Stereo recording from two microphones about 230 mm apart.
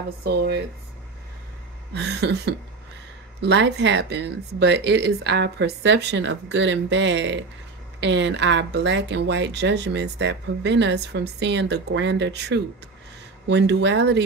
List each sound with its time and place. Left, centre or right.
0.2 s speech: right
2.0 s speech: right